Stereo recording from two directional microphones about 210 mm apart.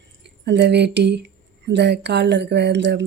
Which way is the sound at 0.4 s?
55° right (ahead or behind).